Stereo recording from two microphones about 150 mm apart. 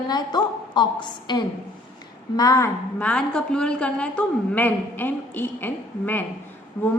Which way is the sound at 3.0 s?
10° left (ahead or behind).